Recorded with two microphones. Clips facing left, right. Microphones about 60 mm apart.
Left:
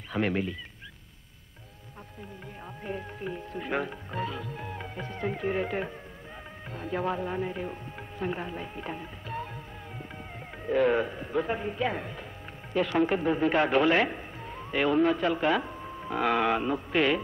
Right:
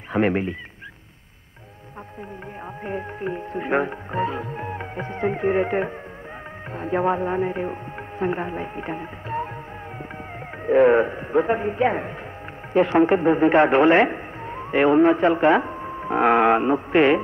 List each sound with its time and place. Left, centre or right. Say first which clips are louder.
0.1 s speech: right 7 dB; right
2.8 s speech: right 7 dB; right
10.6 s speech: right 9 dB; right